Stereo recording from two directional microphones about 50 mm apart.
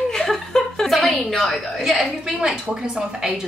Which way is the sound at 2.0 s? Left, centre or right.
Centre.